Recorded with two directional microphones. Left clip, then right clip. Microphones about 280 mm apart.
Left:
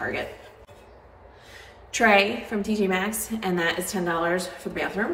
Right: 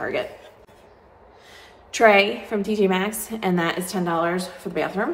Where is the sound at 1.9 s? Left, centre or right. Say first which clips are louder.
Right 3 dB; centre.